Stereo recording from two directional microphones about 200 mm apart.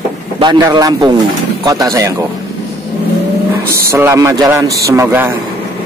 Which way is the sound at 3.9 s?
15° right (ahead or behind).